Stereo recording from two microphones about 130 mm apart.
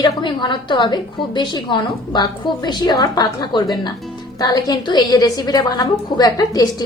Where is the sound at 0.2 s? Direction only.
35° left (ahead or behind).